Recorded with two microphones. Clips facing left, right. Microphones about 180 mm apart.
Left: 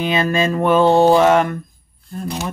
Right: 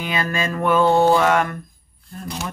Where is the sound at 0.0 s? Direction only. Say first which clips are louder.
Left 6 dB; 25° left (ahead or behind).